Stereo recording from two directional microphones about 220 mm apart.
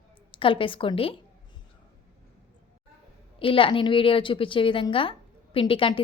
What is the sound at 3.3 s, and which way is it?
Speech, 25° left (ahead or behind).